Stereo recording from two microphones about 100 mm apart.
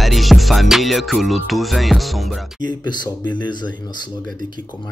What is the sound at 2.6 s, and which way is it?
Speech, 45° left (ahead or behind).